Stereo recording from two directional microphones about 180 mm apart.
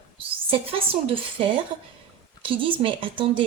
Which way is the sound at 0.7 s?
30° right (ahead or behind).